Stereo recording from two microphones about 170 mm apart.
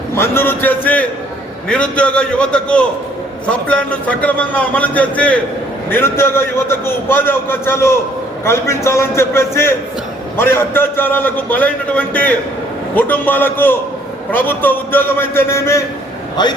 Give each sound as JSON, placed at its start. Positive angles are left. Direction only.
{"t": 0.1, "sound": "a man's voice", "side_deg": 15}